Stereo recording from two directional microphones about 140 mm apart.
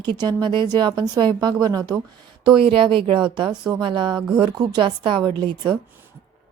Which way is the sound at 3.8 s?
35° right (ahead or behind).